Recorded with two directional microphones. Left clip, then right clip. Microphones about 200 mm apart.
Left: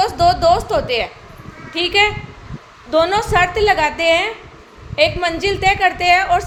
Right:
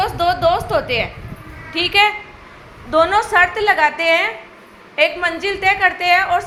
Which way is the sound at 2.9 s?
30° left (ahead or behind).